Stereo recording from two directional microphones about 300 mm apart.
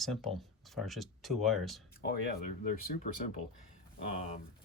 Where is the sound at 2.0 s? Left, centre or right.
Left.